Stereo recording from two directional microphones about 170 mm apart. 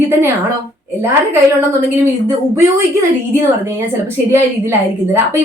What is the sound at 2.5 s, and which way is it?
Speech, 15° right (ahead or behind).